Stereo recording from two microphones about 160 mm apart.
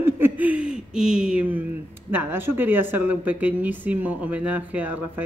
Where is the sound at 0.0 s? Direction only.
10° right (ahead or behind).